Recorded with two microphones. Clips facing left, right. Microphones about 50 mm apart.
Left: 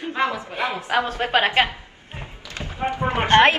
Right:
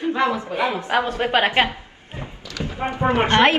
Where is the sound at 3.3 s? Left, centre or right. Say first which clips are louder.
Left 3 dB; left.